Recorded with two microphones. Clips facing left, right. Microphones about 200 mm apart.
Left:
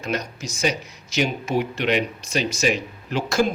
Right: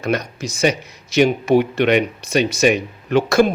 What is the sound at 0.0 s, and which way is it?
Speech, 60° right (ahead or behind).